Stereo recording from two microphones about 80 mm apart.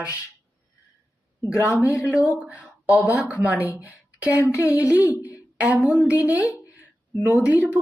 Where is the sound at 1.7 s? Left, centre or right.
Left.